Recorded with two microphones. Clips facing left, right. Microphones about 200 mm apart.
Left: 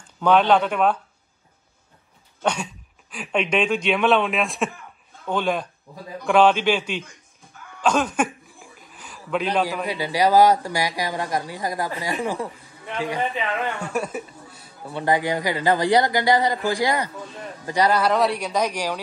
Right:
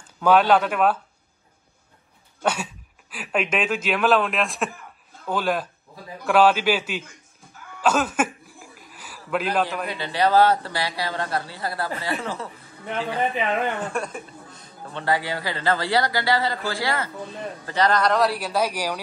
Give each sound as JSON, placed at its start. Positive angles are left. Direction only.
{"t": 0.2, "sound": "speech", "side_deg": -5}
{"t": 2.4, "sound": "speech", "side_deg": -5}
{"t": 7.8, "sound": "chuckle", "side_deg": -5}
{"t": 9.8, "sound": "speech", "side_deg": 10}
{"t": 13.7, "sound": "speech", "side_deg": 5}